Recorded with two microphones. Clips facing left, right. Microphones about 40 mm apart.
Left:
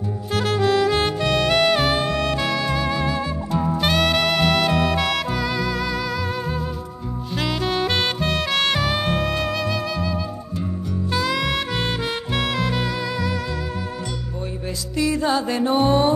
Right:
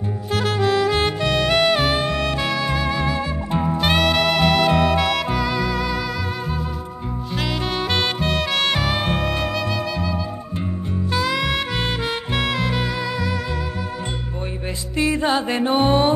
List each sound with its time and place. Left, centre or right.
0.6 s music: right
3.6 s music: centre
4.0 s music: centre
7.3 s music: centre
11.1 s saxophone: right
12.4 s music: right
15.0 s music: right